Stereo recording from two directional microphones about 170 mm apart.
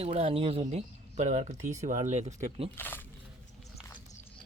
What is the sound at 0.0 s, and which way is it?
Speech, 35° right (ahead or behind).